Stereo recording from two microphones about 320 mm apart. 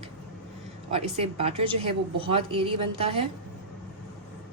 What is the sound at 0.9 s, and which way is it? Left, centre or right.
A woman's voice, centre.